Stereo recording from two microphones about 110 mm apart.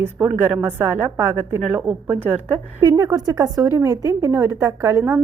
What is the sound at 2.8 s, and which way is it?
A woman's voice, 35° right (ahead or behind).